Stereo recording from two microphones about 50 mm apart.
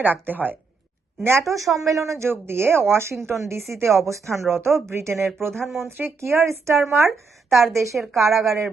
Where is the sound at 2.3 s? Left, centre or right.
Right.